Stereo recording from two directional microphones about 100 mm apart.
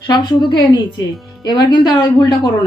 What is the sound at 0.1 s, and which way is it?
A woman's voice, 45° left (ahead or behind).